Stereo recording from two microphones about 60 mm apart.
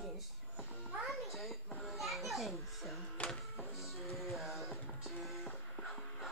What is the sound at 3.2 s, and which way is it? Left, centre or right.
Printer, left.